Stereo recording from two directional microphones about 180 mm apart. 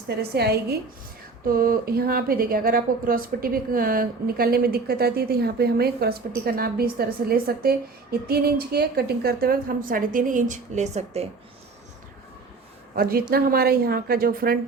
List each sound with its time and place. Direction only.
0.2 s a woman's voice: 60° right (ahead or behind); by 11.3 s 35° right (ahead or behind)
13.0 s a woman's voice: 55° right (ahead or behind)